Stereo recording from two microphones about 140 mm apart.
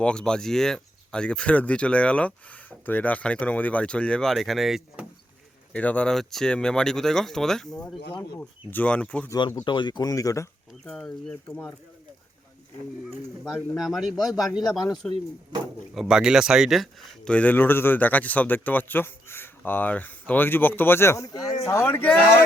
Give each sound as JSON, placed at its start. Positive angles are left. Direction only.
{"t": 0.0, "sound": "speech", "side_deg": 5}
{"t": 5.7, "sound": "speech", "side_deg": 10}
{"t": 9.6, "sound": "speech", "side_deg": 35}
{"t": 10.8, "sound": "speech", "side_deg": 5}
{"t": 13.7, "sound": "speech", "side_deg": 0}
{"t": 16.0, "sound": "speech", "side_deg": -5}